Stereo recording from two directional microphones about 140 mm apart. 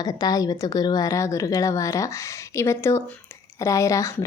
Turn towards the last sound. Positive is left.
turn(degrees=20)  # may be behind; listen again after turning